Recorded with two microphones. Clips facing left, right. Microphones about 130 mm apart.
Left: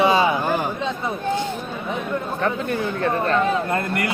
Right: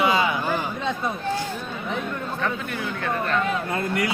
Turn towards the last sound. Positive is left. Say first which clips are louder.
# left 2 dB
turn(degrees=60)  # may be behind; listen again after turning